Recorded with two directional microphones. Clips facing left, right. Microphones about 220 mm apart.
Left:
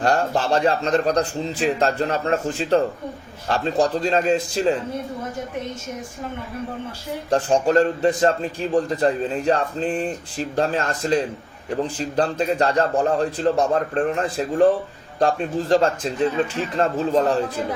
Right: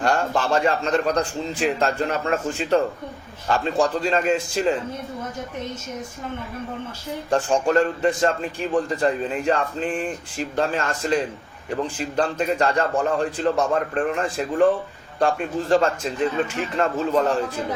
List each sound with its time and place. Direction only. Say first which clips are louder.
0.0 s a man's voice: left 2 dB; 35° left (ahead or behind)
7.3 s a man's voice: left 2 dB; 35° left (ahead or behind)